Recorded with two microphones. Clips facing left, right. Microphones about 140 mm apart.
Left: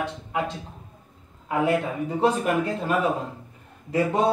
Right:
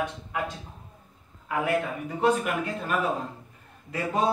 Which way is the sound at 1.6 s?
30° left (ahead or behind).